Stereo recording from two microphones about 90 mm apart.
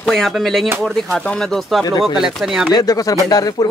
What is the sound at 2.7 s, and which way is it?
Speech, 40° left (ahead or behind).